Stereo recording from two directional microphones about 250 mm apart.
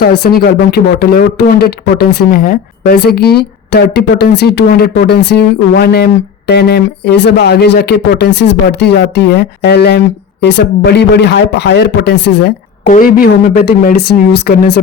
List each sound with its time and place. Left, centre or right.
0.0 s speech: left